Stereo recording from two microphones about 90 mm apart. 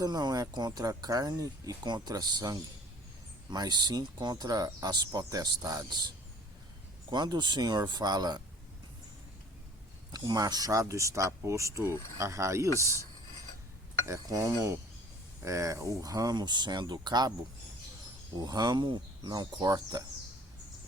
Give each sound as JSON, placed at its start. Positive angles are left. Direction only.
{"t": 0.0, "sound": "speech", "side_deg": -45}
{"t": 7.1, "sound": "speech", "side_deg": -55}
{"t": 10.1, "sound": "speech", "side_deg": -45}
{"t": 14.0, "sound": "speech", "side_deg": -35}
{"t": 18.4, "sound": "speech", "side_deg": -50}